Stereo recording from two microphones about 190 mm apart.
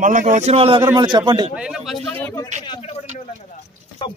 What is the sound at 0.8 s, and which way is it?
Speech, 20° right (ahead or behind).